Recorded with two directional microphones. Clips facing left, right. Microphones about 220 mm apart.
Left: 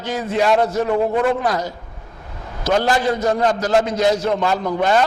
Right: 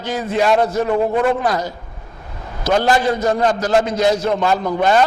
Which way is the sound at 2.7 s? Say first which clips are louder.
Right 2 dB; 15° right (ahead or behind).